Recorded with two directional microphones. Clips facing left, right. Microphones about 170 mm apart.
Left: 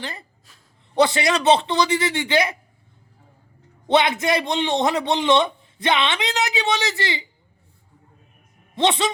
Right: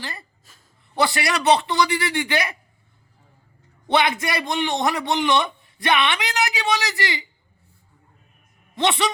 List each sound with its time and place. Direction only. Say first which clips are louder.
0.9 s a man's voice: left 4 dB; 20° left (ahead or behind)
3.8 s a man's voice: left 2 dB; 20° left (ahead or behind)
8.7 s a woman's voice: left 2 dB; 20° left (ahead or behind)